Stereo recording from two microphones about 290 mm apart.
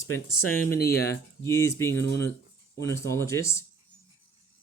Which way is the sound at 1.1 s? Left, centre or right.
Centre.